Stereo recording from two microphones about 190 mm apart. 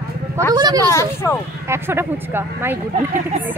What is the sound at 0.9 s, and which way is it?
Speech, 15° left (ahead or behind).